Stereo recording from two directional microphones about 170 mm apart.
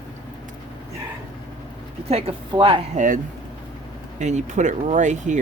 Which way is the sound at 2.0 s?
35° right (ahead or behind).